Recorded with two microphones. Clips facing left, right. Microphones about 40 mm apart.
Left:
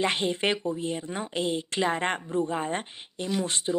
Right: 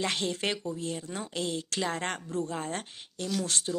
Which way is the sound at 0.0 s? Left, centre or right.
Left.